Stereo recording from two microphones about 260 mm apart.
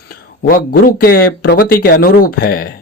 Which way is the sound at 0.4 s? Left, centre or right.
Left.